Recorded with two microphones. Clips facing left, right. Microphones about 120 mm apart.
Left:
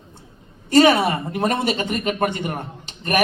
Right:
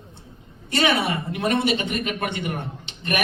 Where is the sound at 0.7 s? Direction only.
40° left (ahead or behind).